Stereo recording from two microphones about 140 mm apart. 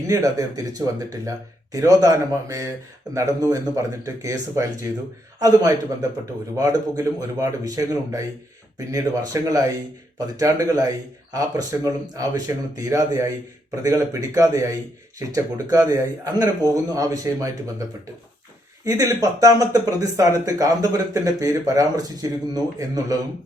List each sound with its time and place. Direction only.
0.1 s speech: 25° right (ahead or behind)
18.9 s speech: 20° right (ahead or behind)